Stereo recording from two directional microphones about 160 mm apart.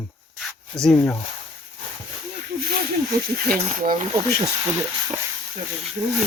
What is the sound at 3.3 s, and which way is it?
Speech, 65° right (ahead or behind).